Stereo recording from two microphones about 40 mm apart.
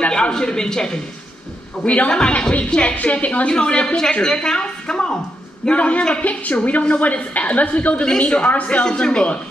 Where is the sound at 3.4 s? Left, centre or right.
Left.